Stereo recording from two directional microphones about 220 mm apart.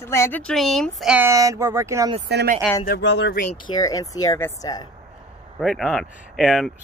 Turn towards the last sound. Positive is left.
turn(degrees=0)  # may be behind; listen again after turning